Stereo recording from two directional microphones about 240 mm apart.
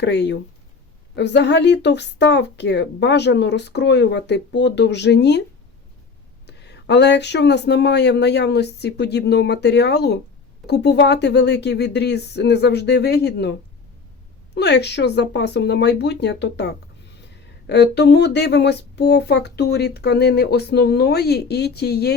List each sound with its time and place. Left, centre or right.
0.0 s speech: left
6.5 s speech: left